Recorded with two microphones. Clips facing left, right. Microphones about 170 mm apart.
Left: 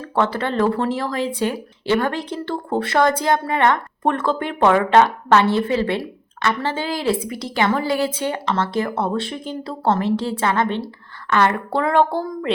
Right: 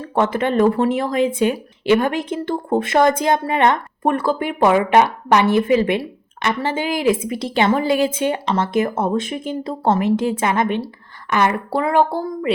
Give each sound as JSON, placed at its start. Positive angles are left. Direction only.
{"t": 0.0, "sound": "speech", "side_deg": -20}